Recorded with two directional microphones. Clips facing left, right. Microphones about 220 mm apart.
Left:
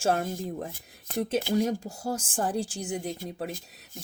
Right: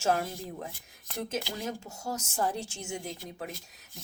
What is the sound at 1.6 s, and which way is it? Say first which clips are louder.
Speech: left 7 dB; 30° left (ahead or behind).